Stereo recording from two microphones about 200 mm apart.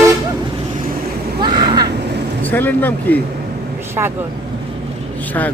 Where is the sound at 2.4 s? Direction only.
10° left (ahead or behind).